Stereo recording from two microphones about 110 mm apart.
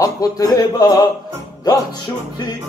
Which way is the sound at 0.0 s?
35° left (ahead or behind).